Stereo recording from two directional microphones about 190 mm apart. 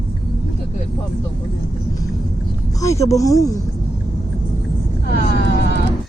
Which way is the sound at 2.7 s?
15° left (ahead or behind).